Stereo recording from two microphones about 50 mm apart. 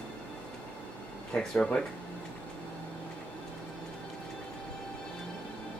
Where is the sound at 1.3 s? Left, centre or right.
Centre.